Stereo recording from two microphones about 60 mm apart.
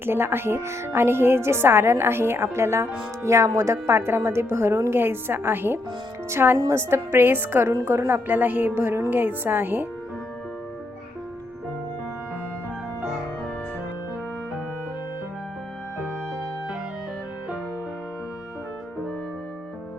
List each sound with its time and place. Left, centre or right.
0.0 s a woman's voice: right
3.9 s a woman's voice: right